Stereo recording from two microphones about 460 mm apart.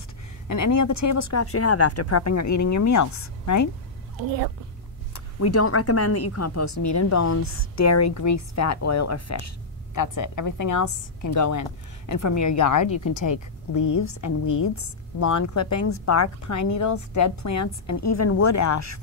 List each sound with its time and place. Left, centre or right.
0.5 s a woman's voice: left
5.1 s a woman's voice: left